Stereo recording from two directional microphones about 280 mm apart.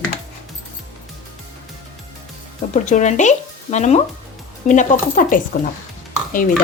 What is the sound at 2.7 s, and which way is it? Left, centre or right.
Speech, left.